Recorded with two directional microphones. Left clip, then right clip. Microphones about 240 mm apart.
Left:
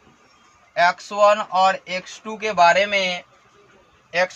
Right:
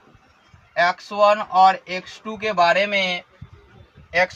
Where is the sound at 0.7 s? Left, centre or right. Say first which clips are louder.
Left 1 dB; centre.